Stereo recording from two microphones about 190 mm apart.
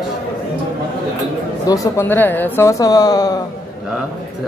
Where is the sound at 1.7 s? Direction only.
15° left (ahead or behind).